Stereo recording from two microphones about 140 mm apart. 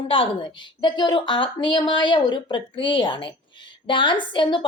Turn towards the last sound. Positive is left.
turn(degrees=35)  # may be behind; listen again after turning